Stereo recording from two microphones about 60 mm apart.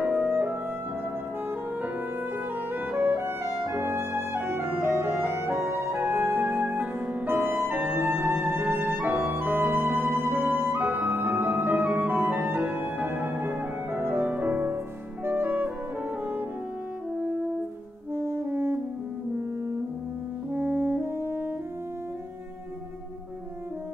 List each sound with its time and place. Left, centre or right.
0.0 s music: right
2.7 s music: right
18.1 s brass instrument: right
20.5 s brass instrument: right